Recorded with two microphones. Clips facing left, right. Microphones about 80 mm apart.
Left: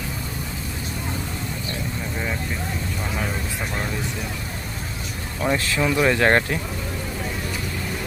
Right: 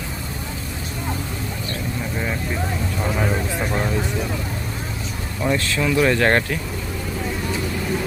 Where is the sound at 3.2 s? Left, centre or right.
Centre.